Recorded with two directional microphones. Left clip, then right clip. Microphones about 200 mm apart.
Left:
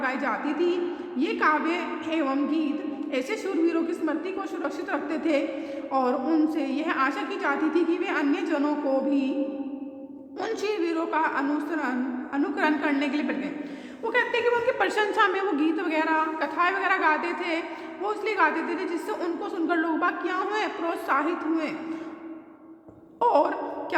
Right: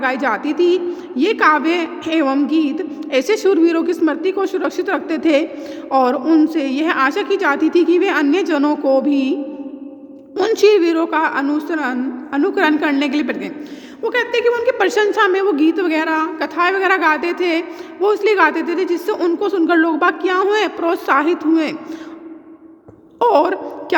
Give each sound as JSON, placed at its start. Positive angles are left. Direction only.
{"t": 0.0, "sound": "a woman's voice", "side_deg": -40}
{"t": 10.3, "sound": "speech", "side_deg": -40}
{"t": 23.2, "sound": "a woman's voice", "side_deg": -45}